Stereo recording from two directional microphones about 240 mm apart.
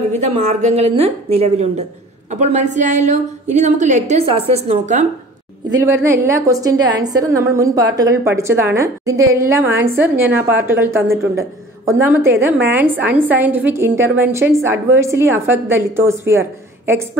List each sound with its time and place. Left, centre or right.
0.2 s a woman's voice: right
5.7 s a woman's voice: centre